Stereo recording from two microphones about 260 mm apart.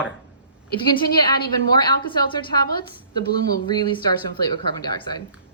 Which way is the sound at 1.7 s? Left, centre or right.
Centre.